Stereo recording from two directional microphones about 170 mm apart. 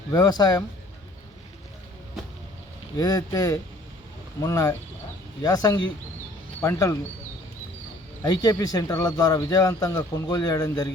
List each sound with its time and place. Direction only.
0.1 s speech: 25° left (ahead or behind)
3.0 s speech: 20° left (ahead or behind)
8.2 s speech: 25° left (ahead or behind)